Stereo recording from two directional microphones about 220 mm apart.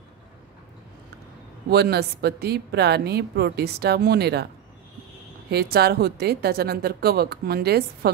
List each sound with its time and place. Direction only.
1.7 s a woman's voice: 45° right (ahead or behind)
5.5 s a woman's voice: 45° right (ahead or behind)